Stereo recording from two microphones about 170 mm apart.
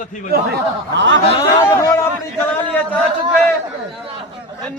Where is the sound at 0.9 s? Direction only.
90° right.